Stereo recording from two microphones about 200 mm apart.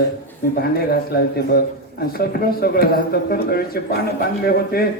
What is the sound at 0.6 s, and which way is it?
Speech, 50° left (ahead or behind).